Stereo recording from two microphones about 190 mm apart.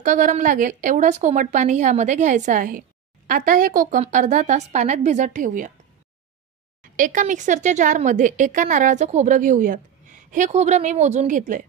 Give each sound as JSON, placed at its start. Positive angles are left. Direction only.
{"t": 0.0, "sound": "a woman's voice", "side_deg": -45}
{"t": 6.8, "sound": "speech", "side_deg": -45}